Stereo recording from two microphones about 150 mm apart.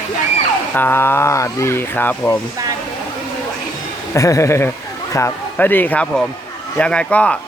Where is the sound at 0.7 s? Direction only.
15° left (ahead or behind).